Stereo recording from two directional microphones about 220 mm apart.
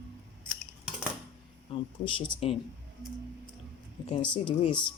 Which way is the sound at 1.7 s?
25° left (ahead or behind).